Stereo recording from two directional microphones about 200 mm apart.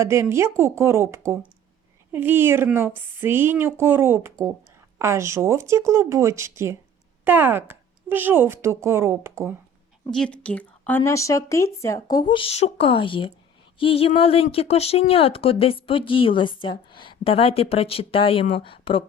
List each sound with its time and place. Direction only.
0.0 s a woman's voice: 15° right (ahead or behind)
10.1 s a woman's voice: 5° left (ahead or behind); by 19.0 s 25° left (ahead or behind)